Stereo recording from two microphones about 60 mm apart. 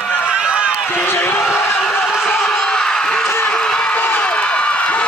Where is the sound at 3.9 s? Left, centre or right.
Left.